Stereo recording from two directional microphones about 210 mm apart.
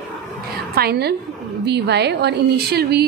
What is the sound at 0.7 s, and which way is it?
A woman's voice, 50° right (ahead or behind).